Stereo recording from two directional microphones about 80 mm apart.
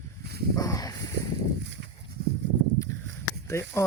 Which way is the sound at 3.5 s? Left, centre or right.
Left.